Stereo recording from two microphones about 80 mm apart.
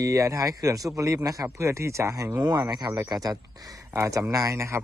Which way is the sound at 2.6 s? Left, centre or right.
Right.